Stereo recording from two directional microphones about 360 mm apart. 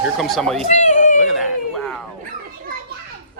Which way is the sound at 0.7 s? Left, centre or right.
Centre.